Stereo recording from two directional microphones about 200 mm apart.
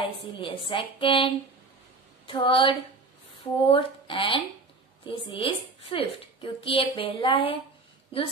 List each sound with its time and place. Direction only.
0.0 s a woman's voice: 25° left (ahead or behind)